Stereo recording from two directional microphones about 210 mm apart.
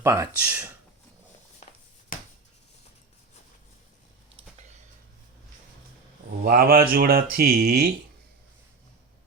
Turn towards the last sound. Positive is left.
turn(degrees=-45)  # may be behind; listen again after turning